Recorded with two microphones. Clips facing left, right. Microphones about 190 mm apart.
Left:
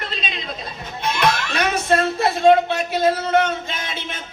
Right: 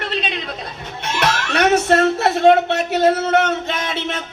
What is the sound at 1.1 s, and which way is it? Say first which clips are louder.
Speech: even; 70° right (ahead or behind).